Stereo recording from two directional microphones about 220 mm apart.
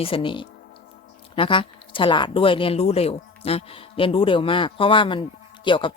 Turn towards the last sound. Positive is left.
turn(degrees=20)  # may be behind; listen again after turning